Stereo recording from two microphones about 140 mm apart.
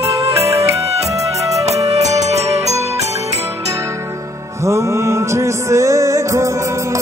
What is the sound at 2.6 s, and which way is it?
Music, 25° right (ahead or behind).